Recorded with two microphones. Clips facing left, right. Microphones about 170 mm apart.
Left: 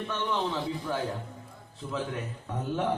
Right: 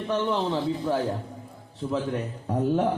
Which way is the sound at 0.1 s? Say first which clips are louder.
Right 7 dB; 35° right (ahead or behind).